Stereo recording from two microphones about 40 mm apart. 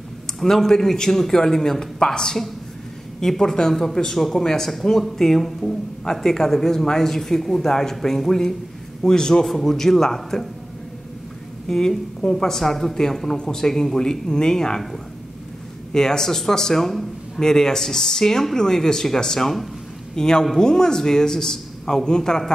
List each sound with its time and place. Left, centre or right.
0.4 s a man's voice: centre
11.6 s a man's voice: centre
15.9 s a man's voice: centre
20.2 s a man's voice: centre